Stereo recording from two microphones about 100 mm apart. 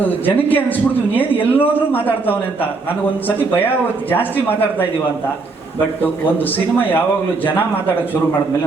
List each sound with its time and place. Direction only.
0.0 s speech: 20° left (ahead or behind)
3.2 s speech: 20° left (ahead or behind)
6.0 s speech: 20° left (ahead or behind)